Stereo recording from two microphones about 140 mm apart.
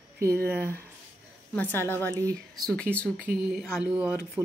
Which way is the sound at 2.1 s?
25° right (ahead or behind).